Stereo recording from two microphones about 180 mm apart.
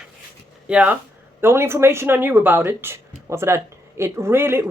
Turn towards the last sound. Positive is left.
turn(degrees=-15)  # may be behind; listen again after turning